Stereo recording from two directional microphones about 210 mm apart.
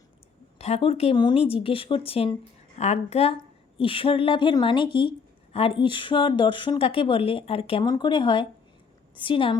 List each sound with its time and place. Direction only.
0.6 s speech: 30° left (ahead or behind)